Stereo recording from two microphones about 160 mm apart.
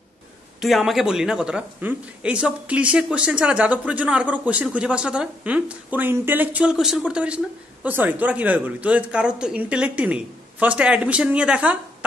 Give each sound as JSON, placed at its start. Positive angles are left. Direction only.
{"t": 0.6, "sound": "speech", "side_deg": 0}